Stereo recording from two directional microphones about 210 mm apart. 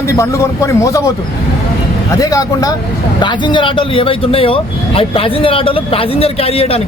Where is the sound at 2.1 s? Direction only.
15° left (ahead or behind).